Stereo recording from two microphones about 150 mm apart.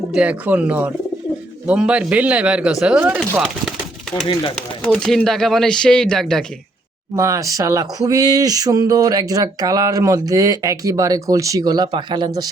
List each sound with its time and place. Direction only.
0.1 s speech: 10° right (ahead or behind)
4.8 s speech: 5° left (ahead or behind)
7.2 s speech: 20° right (ahead or behind)